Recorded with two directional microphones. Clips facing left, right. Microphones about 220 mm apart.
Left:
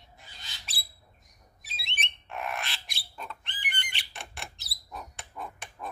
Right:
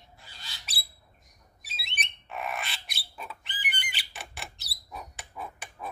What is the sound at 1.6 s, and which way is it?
Alarm, centre (ahead or behind).